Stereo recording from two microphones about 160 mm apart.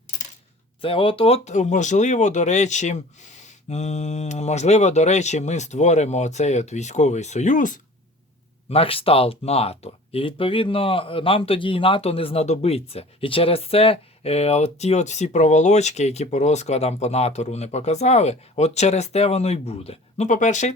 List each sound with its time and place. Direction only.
0.8 s speech: 35° left (ahead or behind); by 7.8 s 55° left (ahead or behind)
8.7 s speech: 35° left (ahead or behind)